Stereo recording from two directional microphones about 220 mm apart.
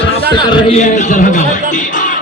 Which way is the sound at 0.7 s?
35° left (ahead or behind).